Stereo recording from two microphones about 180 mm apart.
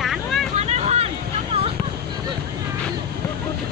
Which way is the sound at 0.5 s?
35° right (ahead or behind).